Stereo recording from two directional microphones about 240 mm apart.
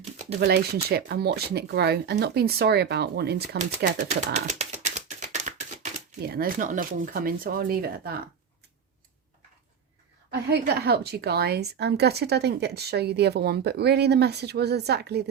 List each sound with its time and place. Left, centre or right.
0.0 s shuffling cards: right
0.3 s speech: right
4.4 s typewriter: right
6.2 s speech: right
10.3 s a woman's voice: right